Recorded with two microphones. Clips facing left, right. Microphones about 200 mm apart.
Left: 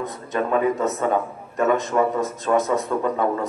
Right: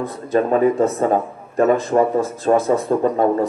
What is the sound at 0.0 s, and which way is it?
A man's voice, 30° right (ahead or behind).